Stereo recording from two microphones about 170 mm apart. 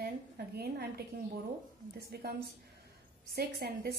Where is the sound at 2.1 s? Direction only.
70° right (ahead or behind).